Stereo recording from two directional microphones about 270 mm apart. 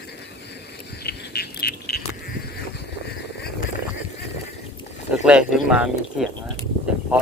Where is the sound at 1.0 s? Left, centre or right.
Left.